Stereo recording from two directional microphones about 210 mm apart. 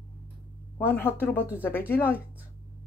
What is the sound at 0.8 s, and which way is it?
Speech, 10° left (ahead or behind).